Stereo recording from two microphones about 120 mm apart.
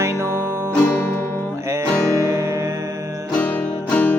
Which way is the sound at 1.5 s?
25° right (ahead or behind).